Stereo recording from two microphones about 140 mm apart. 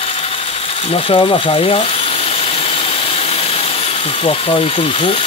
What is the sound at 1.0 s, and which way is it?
Speech, 40° left (ahead or behind).